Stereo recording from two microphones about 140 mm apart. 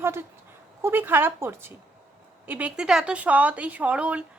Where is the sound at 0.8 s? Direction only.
15° right (ahead or behind).